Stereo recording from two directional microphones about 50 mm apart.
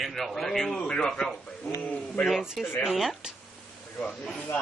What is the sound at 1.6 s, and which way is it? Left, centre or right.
Speech, left.